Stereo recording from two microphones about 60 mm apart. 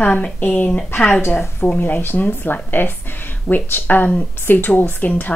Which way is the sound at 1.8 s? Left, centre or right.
Left.